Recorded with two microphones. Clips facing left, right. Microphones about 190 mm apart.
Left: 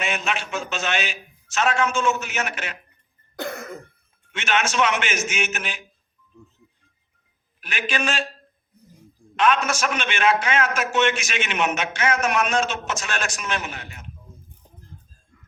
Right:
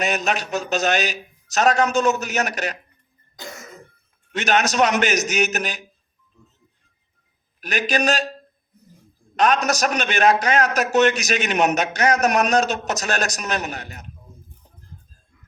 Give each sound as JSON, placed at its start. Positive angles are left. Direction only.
{"t": 0.0, "sound": "a man's voice", "side_deg": -40}
{"t": 3.3, "sound": "throat clearing", "side_deg": 60}
{"t": 4.3, "sound": "a man's voice", "side_deg": -40}
{"t": 7.6, "sound": "a man's voice", "side_deg": -40}
{"t": 9.3, "sound": "a man's voice", "side_deg": -40}